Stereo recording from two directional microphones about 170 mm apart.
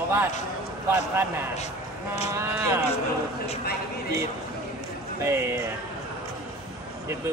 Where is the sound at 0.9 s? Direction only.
15° right (ahead or behind).